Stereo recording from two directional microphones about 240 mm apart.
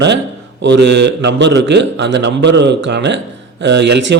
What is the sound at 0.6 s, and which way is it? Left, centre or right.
A man's voice, right.